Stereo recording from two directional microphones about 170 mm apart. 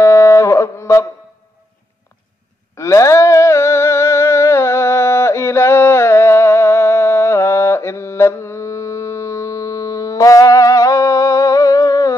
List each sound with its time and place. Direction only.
0.0 s music: 20° left (ahead or behind)
2.7 s humming: 15° left (ahead or behind)